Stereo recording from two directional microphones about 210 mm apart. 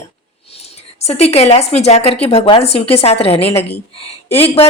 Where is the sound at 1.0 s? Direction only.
30° left (ahead or behind).